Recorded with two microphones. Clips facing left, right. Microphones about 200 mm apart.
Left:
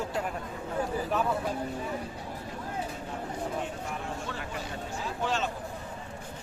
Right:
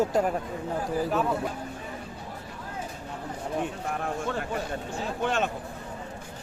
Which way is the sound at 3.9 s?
55° right (ahead or behind).